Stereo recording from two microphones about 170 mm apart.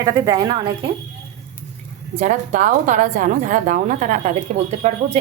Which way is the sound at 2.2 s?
50° right (ahead or behind).